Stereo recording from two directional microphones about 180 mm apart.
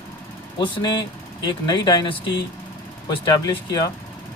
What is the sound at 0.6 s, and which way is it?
Speech, 25° left (ahead or behind).